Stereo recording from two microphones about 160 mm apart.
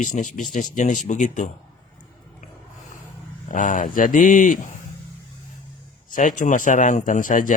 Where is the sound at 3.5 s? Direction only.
55° left (ahead or behind).